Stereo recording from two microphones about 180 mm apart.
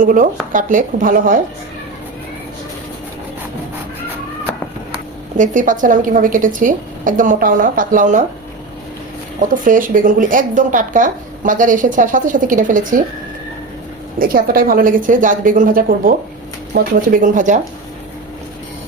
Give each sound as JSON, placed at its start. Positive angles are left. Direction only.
{"t": 0.0, "sound": "speech", "side_deg": -45}
{"t": 5.4, "sound": "speech", "side_deg": -45}
{"t": 9.6, "sound": "speech", "side_deg": -50}
{"t": 14.2, "sound": "speech", "side_deg": -50}